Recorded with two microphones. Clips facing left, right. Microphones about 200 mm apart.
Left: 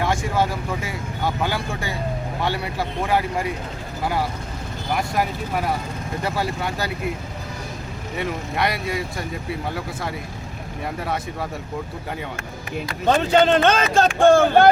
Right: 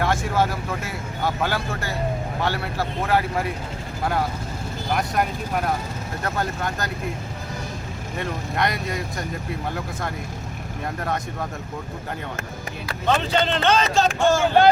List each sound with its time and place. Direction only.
0.3 s speech: 15° left (ahead or behind)
4.9 s speech: 5° left (ahead or behind)
8.2 s speech: 5° left (ahead or behind)
13.1 s speech: 45° left (ahead or behind)